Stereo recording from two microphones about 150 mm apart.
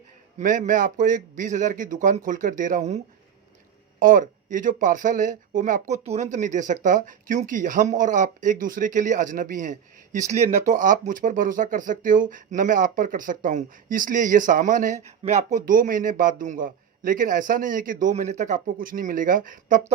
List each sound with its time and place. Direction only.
0.3 s speech: 55° right (ahead or behind)
4.0 s speech: 60° right (ahead or behind)
15.5 s speech: 65° right (ahead or behind)